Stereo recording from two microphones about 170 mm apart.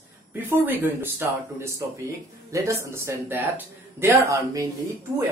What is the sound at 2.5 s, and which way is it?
Speech, 15° right (ahead or behind).